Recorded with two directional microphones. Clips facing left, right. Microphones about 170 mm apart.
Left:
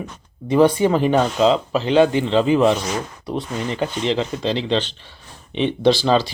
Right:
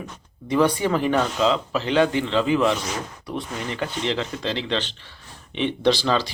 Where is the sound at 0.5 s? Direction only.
20° left (ahead or behind).